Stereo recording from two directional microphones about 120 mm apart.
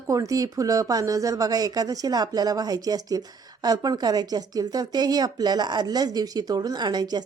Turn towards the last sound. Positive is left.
turn(degrees=-35)  # may be behind; listen again after turning